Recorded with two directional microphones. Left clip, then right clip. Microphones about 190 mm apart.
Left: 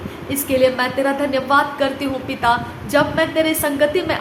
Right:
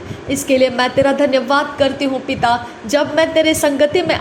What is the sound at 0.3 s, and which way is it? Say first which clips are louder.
A woman's voice: right 2 dB; 25° right (ahead or behind).